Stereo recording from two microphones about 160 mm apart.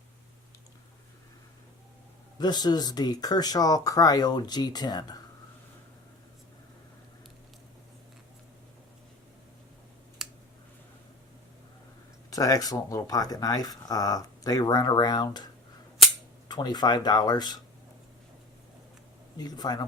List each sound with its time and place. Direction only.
2.4 s speech: 25° left (ahead or behind)
10.2 s a sound: 5° right (ahead or behind)
12.3 s speech: 20° left (ahead or behind)
16.5 s speech: 25° left (ahead or behind)
19.4 s speech: 25° left (ahead or behind)